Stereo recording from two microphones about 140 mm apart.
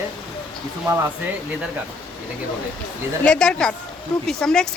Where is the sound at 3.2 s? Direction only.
5° left (ahead or behind).